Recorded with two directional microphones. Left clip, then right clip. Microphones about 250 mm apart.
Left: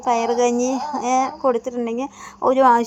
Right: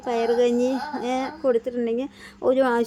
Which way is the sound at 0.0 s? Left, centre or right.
Centre.